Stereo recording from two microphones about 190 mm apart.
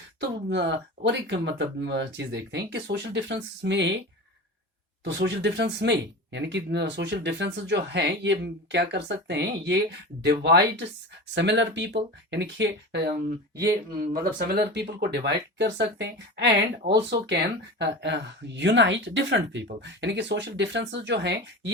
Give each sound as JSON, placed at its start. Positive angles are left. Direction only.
{"t": 0.2, "sound": "speech", "side_deg": -65}
{"t": 5.0, "sound": "speech", "side_deg": -65}
{"t": 13.6, "sound": "speech", "side_deg": -55}